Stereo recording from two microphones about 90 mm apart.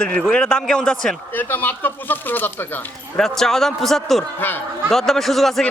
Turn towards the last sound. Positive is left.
turn(degrees=5)  # may be behind; listen again after turning